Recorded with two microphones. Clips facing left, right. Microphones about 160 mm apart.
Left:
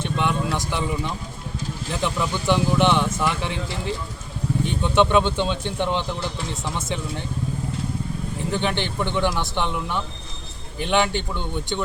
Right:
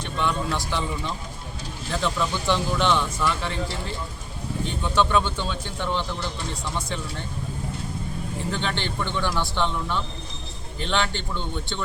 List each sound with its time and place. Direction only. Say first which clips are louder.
0.0 s a sound: left 3 dB; 20° left (ahead or behind)
1.9 s speech: even; 15° left (ahead or behind)
4.6 s speech: left 4 dB; 20° left (ahead or behind)
8.5 s speech: left 6 dB; 15° left (ahead or behind)